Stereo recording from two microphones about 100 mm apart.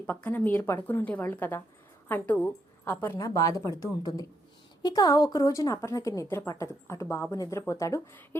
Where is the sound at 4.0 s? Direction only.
45° left (ahead or behind).